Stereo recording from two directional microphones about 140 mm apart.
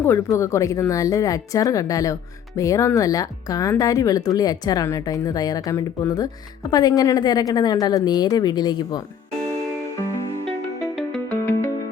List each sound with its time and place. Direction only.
0.0 s speech: 20° left (ahead or behind)
11.3 s music: 15° left (ahead or behind)